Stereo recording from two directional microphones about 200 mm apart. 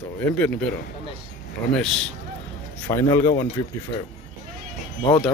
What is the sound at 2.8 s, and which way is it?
Speech, 15° left (ahead or behind).